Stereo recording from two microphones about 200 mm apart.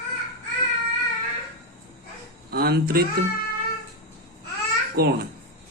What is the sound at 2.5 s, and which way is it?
Speech, 50° right (ahead or behind).